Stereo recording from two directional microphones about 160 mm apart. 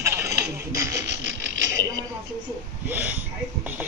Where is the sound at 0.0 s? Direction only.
15° right (ahead or behind).